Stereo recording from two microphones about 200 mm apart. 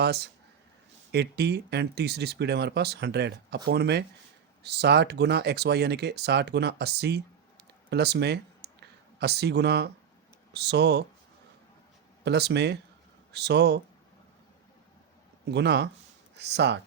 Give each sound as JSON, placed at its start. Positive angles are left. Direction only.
{"t": 0.0, "sound": "speech", "side_deg": -55}
{"t": 12.2, "sound": "speech", "side_deg": -55}
{"t": 15.4, "sound": "speech", "side_deg": -55}